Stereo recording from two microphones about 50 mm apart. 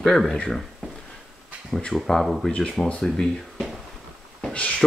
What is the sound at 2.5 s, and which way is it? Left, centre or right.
Speech, centre.